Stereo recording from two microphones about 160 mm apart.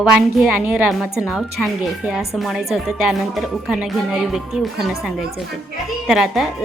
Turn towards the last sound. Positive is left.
turn(degrees=0)  # may be behind; listen again after turning